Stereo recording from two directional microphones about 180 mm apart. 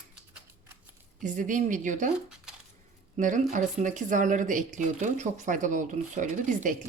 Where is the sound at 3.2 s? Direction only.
45° right (ahead or behind).